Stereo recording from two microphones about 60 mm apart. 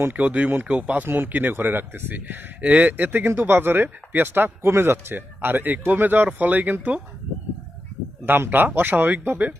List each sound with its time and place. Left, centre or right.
0.1 s speech: right
1.0 s speech: right
8.2 s speech: right